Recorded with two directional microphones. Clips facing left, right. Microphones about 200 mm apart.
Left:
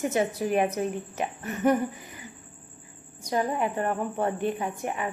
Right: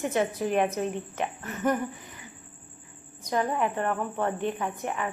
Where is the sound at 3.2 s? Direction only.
10° left (ahead or behind).